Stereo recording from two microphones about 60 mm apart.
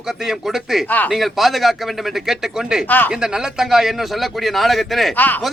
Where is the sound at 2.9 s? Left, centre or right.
Left.